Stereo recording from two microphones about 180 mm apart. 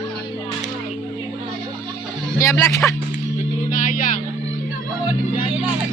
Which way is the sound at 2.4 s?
15° left (ahead or behind).